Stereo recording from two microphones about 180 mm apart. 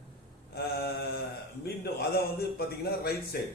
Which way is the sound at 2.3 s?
60° left (ahead or behind).